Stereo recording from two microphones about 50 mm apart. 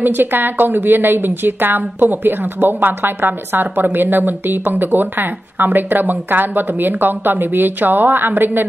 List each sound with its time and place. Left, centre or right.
0.0 s a woman's voice: right